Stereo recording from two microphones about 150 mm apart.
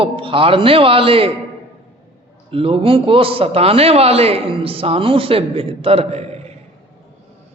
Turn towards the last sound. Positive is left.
turn(degrees=-40)  # may be behind; listen again after turning